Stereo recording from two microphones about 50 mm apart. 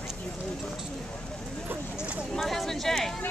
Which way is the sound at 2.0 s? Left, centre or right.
Right.